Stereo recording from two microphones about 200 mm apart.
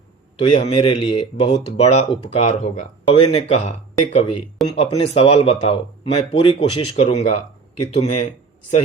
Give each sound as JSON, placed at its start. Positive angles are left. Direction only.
{"t": 0.4, "sound": "speech", "side_deg": 25}